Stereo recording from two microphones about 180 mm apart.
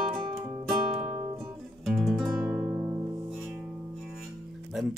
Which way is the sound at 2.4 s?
10° right (ahead or behind).